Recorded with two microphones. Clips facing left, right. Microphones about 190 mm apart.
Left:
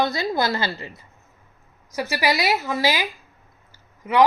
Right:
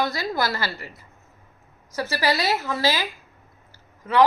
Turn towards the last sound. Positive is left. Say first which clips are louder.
# left 1 dB
turn(degrees=15)  # may be behind; listen again after turning